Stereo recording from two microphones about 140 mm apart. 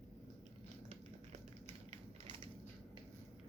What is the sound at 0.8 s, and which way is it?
Typewriter, 50° right (ahead or behind).